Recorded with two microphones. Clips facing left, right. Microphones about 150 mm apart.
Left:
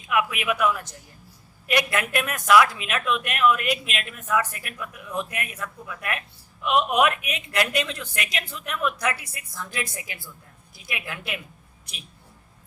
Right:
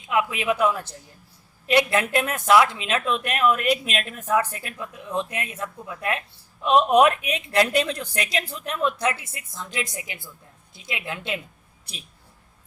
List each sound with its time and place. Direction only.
0.1 s speech: 25° right (ahead or behind)